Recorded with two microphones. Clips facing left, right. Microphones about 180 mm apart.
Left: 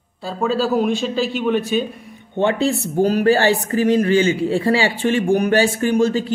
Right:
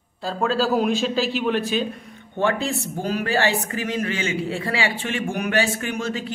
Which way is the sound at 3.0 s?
35° left (ahead or behind).